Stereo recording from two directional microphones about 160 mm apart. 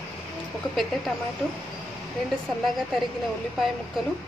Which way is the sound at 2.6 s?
Centre (ahead or behind).